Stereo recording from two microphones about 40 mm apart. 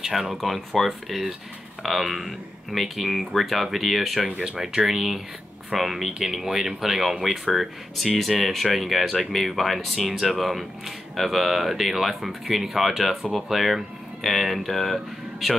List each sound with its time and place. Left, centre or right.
0.0 s speech: centre
4.5 s speech: centre